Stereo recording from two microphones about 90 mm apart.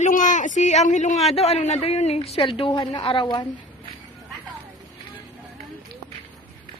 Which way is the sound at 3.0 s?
60° left (ahead or behind).